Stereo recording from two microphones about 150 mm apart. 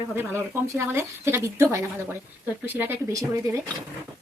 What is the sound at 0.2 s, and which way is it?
A woman's voice, 15° right (ahead or behind).